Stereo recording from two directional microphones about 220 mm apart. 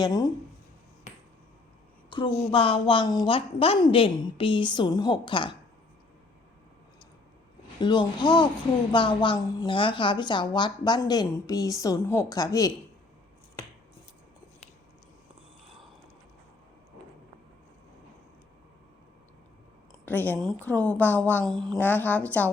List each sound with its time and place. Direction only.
0.0 s a woman's voice: 15° left (ahead or behind)
2.0 s a woman's voice: 20° left (ahead or behind)
7.8 s a woman's voice: 20° left (ahead or behind)
20.1 s a woman's voice: 10° left (ahead or behind)